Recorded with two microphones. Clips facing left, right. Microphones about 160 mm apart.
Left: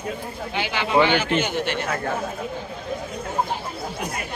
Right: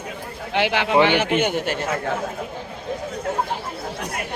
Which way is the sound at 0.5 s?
75° right (ahead or behind).